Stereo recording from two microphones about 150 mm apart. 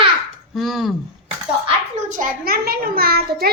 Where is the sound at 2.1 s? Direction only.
75° right (ahead or behind); by 3.5 s 90° right.